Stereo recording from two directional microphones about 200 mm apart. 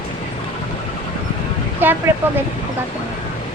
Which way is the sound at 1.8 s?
10° right (ahead or behind).